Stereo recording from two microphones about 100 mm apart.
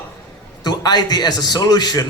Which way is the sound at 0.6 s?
45° left (ahead or behind).